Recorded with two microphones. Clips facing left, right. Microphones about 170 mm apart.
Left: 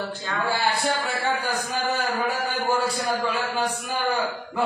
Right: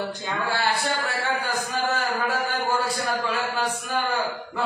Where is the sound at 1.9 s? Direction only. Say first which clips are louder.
Left 1 dB; 10° left (ahead or behind).